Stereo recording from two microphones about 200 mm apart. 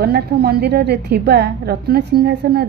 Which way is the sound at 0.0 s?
55° right (ahead or behind).